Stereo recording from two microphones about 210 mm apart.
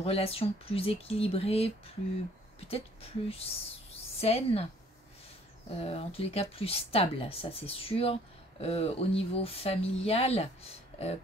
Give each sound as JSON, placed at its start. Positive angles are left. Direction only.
{"t": 0.0, "sound": "speech", "side_deg": 25}
{"t": 2.7, "sound": "speech", "side_deg": 30}
{"t": 5.7, "sound": "speech", "side_deg": 25}